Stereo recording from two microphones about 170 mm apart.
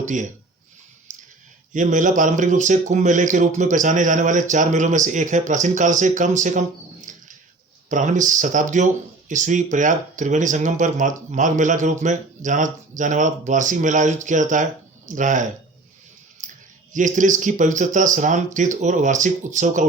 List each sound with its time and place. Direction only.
0.0 s speech: 45° right (ahead or behind)
1.1 s clicking: 45° right (ahead or behind)
1.7 s speech: 50° right (ahead or behind)
16.4 s a sound: 45° right (ahead or behind)
16.9 s speech: 50° right (ahead or behind)